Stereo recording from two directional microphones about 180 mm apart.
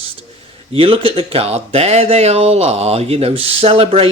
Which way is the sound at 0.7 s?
30° right (ahead or behind).